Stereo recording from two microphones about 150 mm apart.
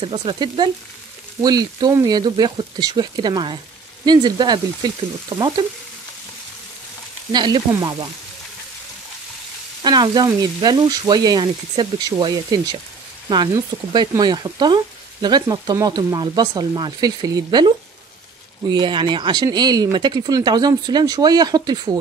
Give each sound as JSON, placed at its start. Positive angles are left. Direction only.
{"t": 0.0, "sound": "speech", "side_deg": -35}
{"t": 7.3, "sound": "speech", "side_deg": -30}
{"t": 9.8, "sound": "speech", "side_deg": -30}
{"t": 13.9, "sound": "speech", "side_deg": -30}